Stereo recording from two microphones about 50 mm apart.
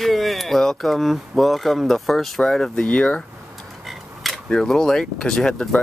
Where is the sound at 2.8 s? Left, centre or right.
Left.